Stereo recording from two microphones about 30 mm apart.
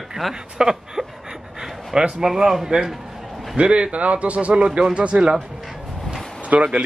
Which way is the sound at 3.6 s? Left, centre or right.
Right.